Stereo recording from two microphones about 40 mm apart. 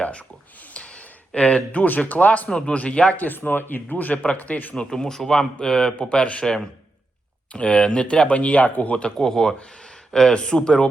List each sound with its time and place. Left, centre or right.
0.0 s speech: left
0.7 s a sound: left
2.0 s speech: left
2.5 s speech: centre
2.7 s speech: left
3.2 s speech: left
4.9 s speech: centre
7.5 s speech: left
8.3 s speech: left
9.1 s a man's voice: centre
10.3 s speech: left